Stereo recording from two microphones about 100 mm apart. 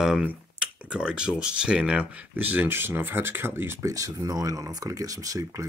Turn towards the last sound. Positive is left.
turn(degrees=-35)  # may be behind; listen again after turning